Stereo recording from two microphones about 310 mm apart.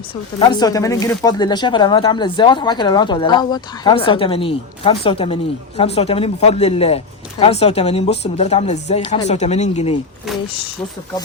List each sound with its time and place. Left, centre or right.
0.3 s speech: centre